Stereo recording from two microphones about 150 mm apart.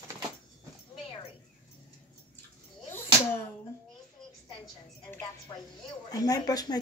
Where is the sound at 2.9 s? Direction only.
15° left (ahead or behind).